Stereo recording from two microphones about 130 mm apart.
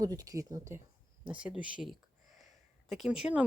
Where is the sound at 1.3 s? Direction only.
10° right (ahead or behind).